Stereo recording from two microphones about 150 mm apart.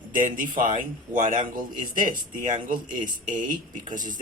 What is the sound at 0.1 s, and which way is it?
Speech, 65° right (ahead or behind).